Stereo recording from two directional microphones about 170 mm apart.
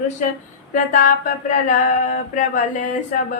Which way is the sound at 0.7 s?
50° left (ahead or behind).